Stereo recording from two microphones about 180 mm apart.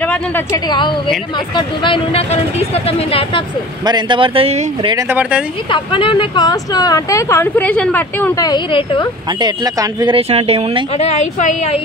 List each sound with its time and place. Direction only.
3.1 s a woman's voice: 30° left (ahead or behind)
3.8 s speech: 25° right (ahead or behind)
5.7 s speech: 30° left (ahead or behind); by 8.5 s 10° left (ahead or behind)
8.5 s speech: 25° left (ahead or behind)
9.4 s speech: 25° right (ahead or behind)
11.0 s a woman's voice: 40° left (ahead or behind)